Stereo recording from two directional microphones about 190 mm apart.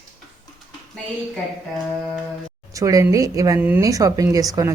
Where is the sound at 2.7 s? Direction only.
15° right (ahead or behind).